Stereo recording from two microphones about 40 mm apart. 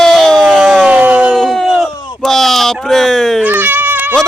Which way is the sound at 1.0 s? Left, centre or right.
Right.